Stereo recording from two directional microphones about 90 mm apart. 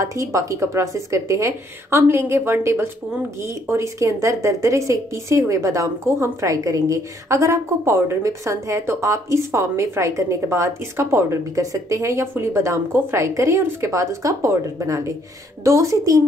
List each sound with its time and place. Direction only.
0.0 s a woman's voice: 35° right (ahead or behind)